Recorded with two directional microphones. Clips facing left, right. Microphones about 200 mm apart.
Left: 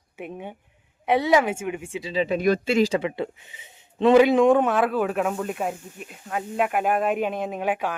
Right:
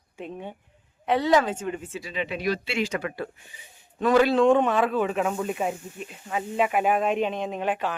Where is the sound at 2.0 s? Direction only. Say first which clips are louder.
Left 10 dB; 30° left (ahead or behind).